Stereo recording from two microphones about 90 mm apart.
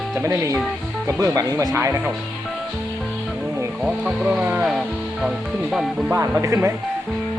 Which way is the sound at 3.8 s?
10° right (ahead or behind).